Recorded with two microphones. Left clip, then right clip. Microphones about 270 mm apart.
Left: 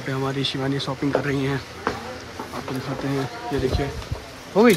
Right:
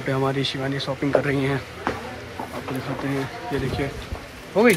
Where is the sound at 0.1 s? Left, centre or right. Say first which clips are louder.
Right 2 dB; centre.